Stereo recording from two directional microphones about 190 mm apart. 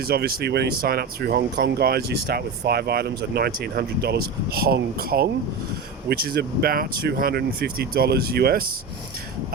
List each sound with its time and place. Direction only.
0.0 s speech: 55° right (ahead or behind)